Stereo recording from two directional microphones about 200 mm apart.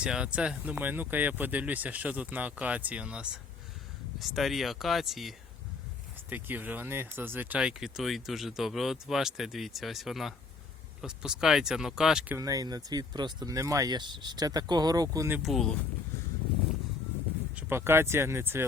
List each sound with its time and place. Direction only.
0.0 s speech: 5° right (ahead or behind)
6.3 s speech: 10° right (ahead or behind)
12.4 s speech: 20° right (ahead or behind)
15.4 s speech: centre (ahead or behind)
17.5 s speech: 10° right (ahead or behind)